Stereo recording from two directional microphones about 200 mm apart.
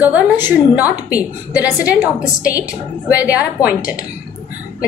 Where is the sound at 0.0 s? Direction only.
10° right (ahead or behind).